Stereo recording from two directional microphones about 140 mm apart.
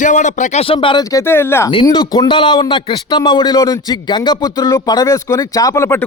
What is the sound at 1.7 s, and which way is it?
Speech, 30° left (ahead or behind).